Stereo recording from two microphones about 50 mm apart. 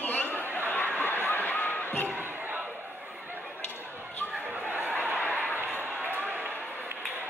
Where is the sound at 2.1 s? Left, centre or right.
Right.